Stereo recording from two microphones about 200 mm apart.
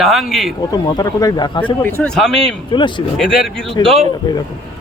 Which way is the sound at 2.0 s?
5° left (ahead or behind).